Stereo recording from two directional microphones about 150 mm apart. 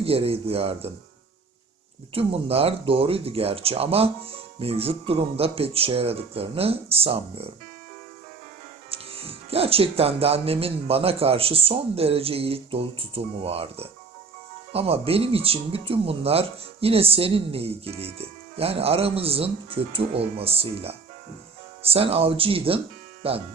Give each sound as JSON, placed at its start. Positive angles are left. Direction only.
{"t": 0.0, "sound": "speech", "side_deg": -40}
{"t": 2.1, "sound": "speech", "side_deg": -40}
{"t": 8.9, "sound": "speech", "side_deg": -40}